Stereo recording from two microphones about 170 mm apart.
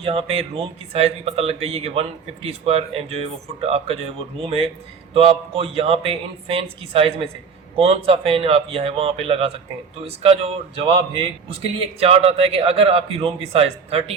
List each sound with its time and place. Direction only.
0.0 s a man's voice: 35° right (ahead or behind)